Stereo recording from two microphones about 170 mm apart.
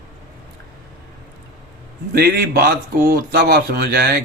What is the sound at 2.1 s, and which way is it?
A man's voice, 65° right (ahead or behind).